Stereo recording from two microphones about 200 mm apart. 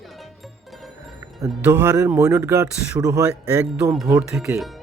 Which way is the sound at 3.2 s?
5° right (ahead or behind).